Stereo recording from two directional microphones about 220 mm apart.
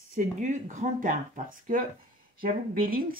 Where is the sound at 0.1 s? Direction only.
35° right (ahead or behind).